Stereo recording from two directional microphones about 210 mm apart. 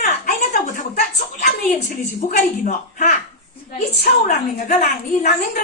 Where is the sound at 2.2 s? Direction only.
40° left (ahead or behind).